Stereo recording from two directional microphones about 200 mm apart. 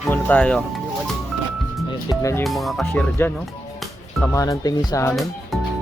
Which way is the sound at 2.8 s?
10° left (ahead or behind).